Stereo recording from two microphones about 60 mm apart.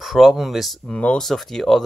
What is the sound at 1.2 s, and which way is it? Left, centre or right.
Speech, centre.